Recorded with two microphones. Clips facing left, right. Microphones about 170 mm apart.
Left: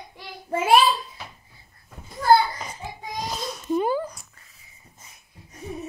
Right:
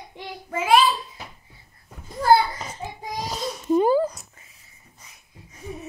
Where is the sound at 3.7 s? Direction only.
35° right (ahead or behind).